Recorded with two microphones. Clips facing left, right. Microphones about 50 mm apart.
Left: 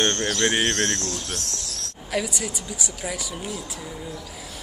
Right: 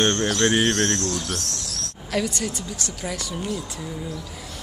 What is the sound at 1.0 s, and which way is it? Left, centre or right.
Speech, right.